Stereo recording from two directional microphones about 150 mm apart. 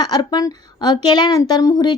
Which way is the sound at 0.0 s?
30° left (ahead or behind).